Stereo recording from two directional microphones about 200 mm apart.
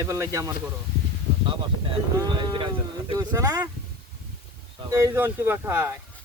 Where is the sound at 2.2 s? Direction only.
20° right (ahead or behind).